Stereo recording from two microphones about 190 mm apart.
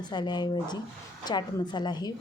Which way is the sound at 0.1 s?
20° left (ahead or behind).